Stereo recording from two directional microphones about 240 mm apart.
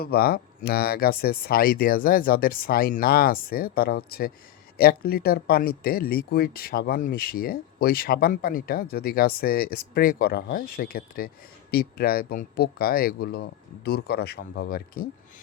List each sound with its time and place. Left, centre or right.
0.0 s speech: left